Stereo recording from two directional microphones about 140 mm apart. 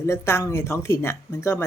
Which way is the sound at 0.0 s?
20° left (ahead or behind).